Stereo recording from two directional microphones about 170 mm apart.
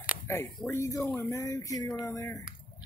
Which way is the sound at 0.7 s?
15° left (ahead or behind).